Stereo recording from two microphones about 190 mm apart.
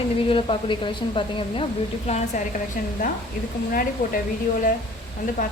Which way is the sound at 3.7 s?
45° left (ahead or behind).